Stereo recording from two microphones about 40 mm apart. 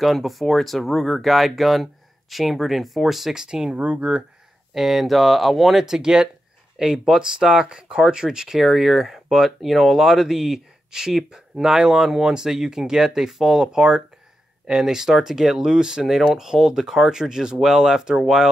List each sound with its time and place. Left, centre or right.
0.0 s speech: centre
3.7 s speech: right
4.7 s speech: centre
5.9 s speech: centre
8.5 s speech: centre